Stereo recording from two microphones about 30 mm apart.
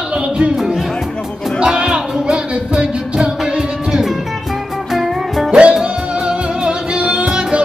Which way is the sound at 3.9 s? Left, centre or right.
Centre.